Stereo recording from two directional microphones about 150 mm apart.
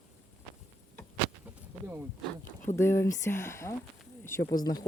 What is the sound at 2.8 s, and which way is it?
Speech, 15° left (ahead or behind).